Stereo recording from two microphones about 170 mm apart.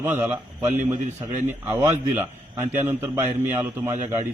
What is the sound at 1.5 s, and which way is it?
A man's voice, 15° right (ahead or behind).